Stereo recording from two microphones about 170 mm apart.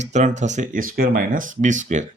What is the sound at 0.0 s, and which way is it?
Speech, 45° right (ahead or behind).